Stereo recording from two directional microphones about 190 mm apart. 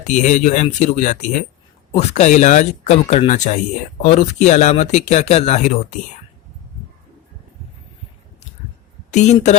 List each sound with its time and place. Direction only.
0.1 s speech: 40° left (ahead or behind)
9.1 s speech: 35° left (ahead or behind)